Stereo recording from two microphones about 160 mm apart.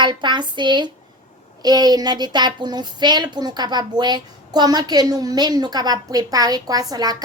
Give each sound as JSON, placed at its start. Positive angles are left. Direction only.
{"t": 0.0, "sound": "a woman's voice", "side_deg": -30}